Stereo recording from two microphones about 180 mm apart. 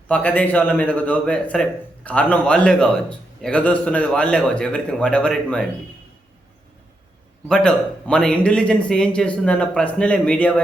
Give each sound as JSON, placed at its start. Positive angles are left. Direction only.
{"t": 0.1, "sound": "a man's voice", "side_deg": 10}
{"t": 7.4, "sound": "a man's voice", "side_deg": 5}